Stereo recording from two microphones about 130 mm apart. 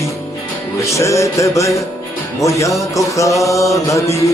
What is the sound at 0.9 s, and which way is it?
Music, 25° left (ahead or behind).